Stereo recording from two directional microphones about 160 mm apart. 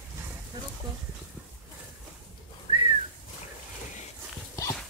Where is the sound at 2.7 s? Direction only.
30° right (ahead or behind).